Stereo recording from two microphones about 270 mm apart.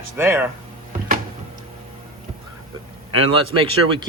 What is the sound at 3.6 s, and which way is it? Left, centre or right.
Speech, centre.